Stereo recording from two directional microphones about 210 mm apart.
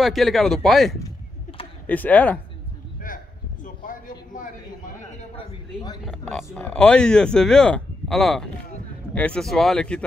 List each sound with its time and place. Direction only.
0.0 s speech: centre (ahead or behind)
3.6 s a sound: 40° left (ahead or behind)
6.0 s speech: centre (ahead or behind)